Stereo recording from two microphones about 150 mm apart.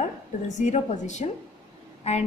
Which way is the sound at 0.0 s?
55° left (ahead or behind).